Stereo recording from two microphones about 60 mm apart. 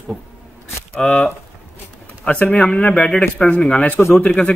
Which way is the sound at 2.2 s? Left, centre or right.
Left.